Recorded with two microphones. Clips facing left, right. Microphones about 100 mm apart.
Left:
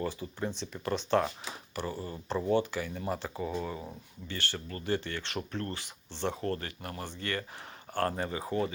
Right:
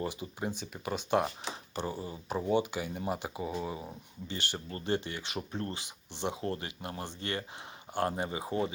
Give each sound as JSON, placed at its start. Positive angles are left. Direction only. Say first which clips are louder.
{"t": 0.1, "sound": "speech", "louder": "left 1 dB", "side_deg": -15}
{"t": 1.5, "sound": "speech", "louder": "right 1 dB", "side_deg": -20}